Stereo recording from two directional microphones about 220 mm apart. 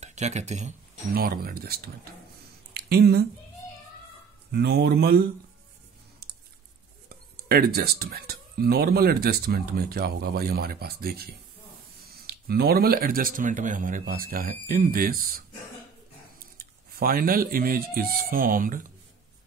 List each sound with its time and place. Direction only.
0.0 s speech: 30° right (ahead or behind)
4.5 s speech: 45° right (ahead or behind)
7.1 s speech: 45° right (ahead or behind)